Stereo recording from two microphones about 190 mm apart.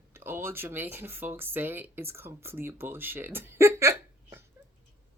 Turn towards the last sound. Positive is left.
turn(degrees=-15)  # may be behind; listen again after turning